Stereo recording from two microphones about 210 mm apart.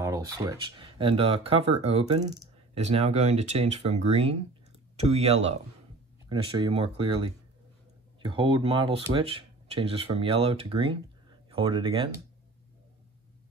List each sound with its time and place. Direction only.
0.0 s speech: 15° right (ahead or behind)
2.2 s a sound: 15° right (ahead or behind)
2.8 s speech: 30° right (ahead or behind)